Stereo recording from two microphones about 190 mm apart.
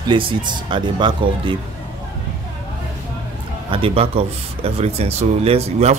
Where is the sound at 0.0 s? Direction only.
25° right (ahead or behind).